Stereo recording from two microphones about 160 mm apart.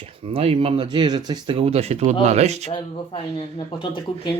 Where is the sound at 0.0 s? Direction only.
35° right (ahead or behind).